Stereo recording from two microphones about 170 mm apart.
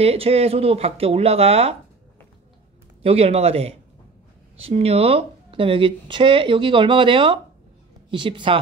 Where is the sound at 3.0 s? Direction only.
35° right (ahead or behind).